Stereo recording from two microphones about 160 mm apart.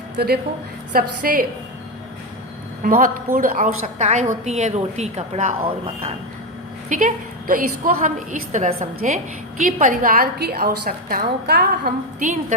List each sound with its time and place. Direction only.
0.2 s a woman's voice: 75° right (ahead or behind)
0.9 s a woman's voice: 60° right (ahead or behind)
2.8 s a woman's voice: 60° right (ahead or behind)
6.8 s a woman's voice: 55° right (ahead or behind)